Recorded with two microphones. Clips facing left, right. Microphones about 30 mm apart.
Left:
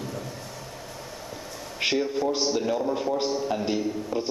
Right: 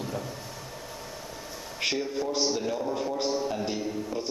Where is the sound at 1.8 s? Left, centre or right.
Centre.